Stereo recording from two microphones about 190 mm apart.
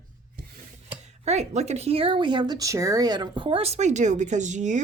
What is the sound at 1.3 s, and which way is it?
Speech, 35° right (ahead or behind).